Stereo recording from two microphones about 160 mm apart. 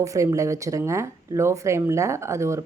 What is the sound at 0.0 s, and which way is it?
A woman's voice, 20° right (ahead or behind).